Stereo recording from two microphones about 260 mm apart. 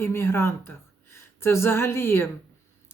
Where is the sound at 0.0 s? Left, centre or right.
Centre.